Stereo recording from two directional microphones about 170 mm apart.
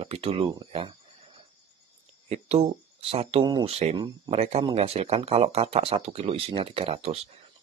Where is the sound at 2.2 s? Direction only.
40° right (ahead or behind).